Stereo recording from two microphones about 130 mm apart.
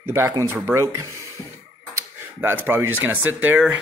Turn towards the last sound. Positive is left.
turn(degrees=-10)  # may be behind; listen again after turning